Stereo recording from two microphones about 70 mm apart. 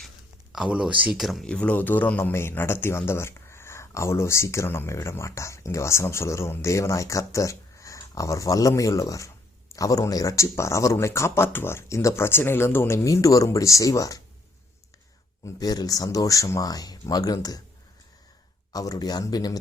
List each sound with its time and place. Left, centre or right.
0.5 s speech: centre
1.1 s speech: centre
1.5 s a man's voice: centre; by 14.2 s left
15.5 s speech: left
16.6 s speech: left
18.7 s speech: left